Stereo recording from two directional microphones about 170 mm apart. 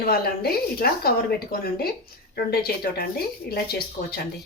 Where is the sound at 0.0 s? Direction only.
65° left (ahead or behind).